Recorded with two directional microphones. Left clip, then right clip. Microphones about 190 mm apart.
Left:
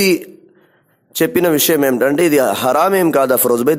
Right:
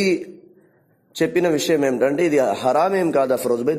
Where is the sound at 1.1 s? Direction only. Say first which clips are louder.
Left 5 dB; 25° left (ahead or behind).